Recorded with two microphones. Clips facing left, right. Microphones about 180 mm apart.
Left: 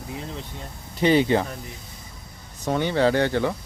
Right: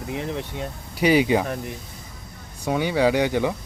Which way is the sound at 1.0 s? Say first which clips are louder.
Even; 10° right (ahead or behind).